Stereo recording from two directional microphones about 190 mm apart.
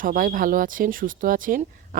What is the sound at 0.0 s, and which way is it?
Speech, 45° right (ahead or behind).